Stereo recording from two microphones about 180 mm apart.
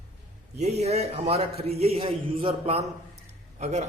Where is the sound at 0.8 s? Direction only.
35° right (ahead or behind).